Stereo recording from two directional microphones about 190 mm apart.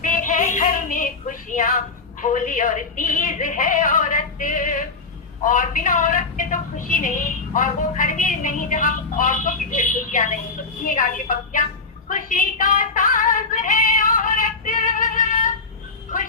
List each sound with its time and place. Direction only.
0.0 s a sound: 45° left (ahead or behind)
2.2 s a woman's voice: 45° left (ahead or behind)
12.0 s female singing: 45° left (ahead or behind)